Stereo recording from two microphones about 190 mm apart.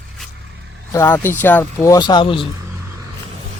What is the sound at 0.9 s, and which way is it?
Speech, 15° left (ahead or behind).